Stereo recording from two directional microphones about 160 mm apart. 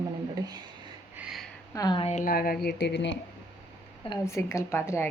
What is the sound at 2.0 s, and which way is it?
Speech, 50° left (ahead or behind).